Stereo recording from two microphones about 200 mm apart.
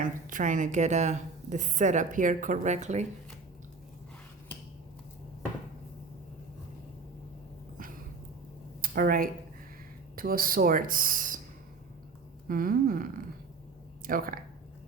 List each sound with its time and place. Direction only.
0.0 s speech: 40° right (ahead or behind)
8.8 s a sound: 45° right (ahead or behind)
10.2 s speech: 45° right (ahead or behind)
12.5 s speech: 45° right (ahead or behind)